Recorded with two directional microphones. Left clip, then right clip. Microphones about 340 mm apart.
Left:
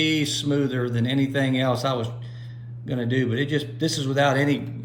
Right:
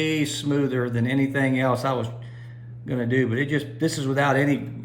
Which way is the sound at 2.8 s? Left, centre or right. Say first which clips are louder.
Right 2 dB; left.